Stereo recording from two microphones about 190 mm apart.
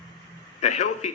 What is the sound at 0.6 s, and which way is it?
Speech, 40° left (ahead or behind).